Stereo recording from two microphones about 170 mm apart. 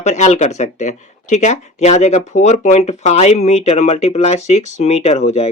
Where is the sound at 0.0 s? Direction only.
40° left (ahead or behind).